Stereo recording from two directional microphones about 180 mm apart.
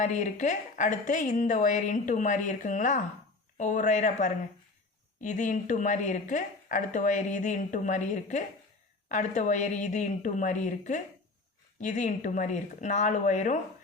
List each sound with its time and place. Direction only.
0.0 s speech: 45° left (ahead or behind)